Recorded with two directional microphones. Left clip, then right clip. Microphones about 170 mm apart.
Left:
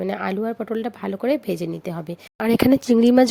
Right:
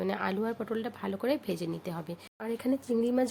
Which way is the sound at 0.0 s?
35° left (ahead or behind).